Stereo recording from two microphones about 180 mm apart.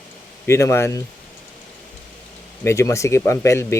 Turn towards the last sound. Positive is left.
turn(degrees=15)  # may be behind; listen again after turning